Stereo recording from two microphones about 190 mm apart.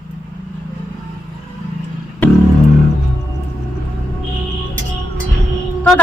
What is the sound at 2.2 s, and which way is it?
Speech, 10° left (ahead or behind).